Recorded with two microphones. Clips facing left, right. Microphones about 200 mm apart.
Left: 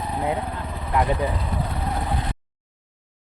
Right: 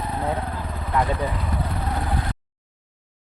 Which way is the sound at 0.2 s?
10° left (ahead or behind).